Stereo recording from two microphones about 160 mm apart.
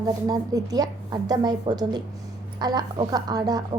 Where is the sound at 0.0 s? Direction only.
25° right (ahead or behind).